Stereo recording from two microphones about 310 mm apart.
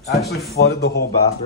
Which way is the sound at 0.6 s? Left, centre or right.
Left.